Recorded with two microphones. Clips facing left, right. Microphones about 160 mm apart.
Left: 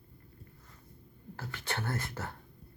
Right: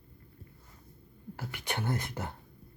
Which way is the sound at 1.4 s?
15° right (ahead or behind).